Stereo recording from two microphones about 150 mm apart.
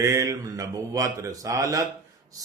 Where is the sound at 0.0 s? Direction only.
20° right (ahead or behind).